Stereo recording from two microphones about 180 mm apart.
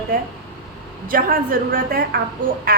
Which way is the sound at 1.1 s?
50° right (ahead or behind).